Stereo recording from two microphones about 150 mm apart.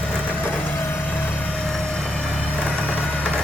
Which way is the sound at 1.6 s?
Centre (ahead or behind).